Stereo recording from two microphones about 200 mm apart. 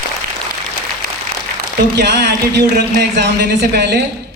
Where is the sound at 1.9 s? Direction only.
60° right (ahead or behind).